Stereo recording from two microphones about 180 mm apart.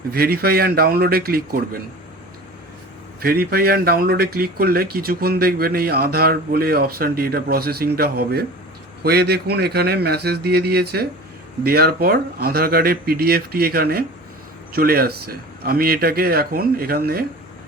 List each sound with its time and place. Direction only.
0.1 s speech: 55° right (ahead or behind)
3.2 s speech: 55° right (ahead or behind)